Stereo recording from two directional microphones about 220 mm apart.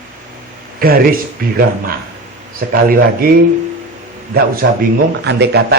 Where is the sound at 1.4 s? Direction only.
40° right (ahead or behind).